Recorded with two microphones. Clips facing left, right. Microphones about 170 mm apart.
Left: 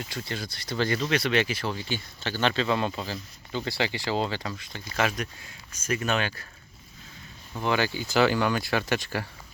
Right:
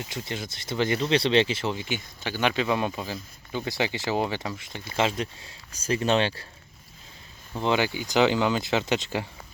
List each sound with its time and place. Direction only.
0.0 s speech: 20° right (ahead or behind)
7.5 s speech: 20° right (ahead or behind)